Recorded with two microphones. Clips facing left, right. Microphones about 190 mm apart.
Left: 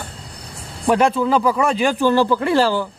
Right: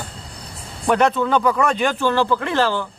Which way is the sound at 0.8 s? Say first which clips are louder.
Left 1 dB; 5° left (ahead or behind).